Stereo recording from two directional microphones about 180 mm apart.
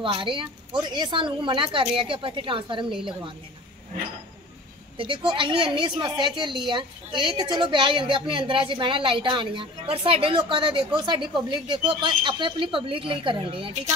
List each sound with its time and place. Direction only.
0.0 s a woman's voice: 30° right (ahead or behind)
4.9 s a woman's voice: 30° right (ahead or behind)